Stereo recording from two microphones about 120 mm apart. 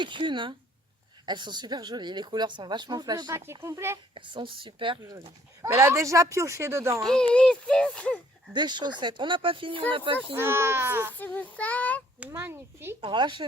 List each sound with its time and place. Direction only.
0.0 s speech: 40° right (ahead or behind)
3.3 s speech: 20° right (ahead or behind)
4.1 s speech: 45° right (ahead or behind)
5.6 s speech: 25° right (ahead or behind)
7.0 s speech: 5° left (ahead or behind)
8.5 s speech: 40° right (ahead or behind)
10.3 s speech: 20° right (ahead or behind)
11.2 s speech: 10° left (ahead or behind)
12.2 s speech: 15° right (ahead or behind)
13.0 s speech: 40° right (ahead or behind)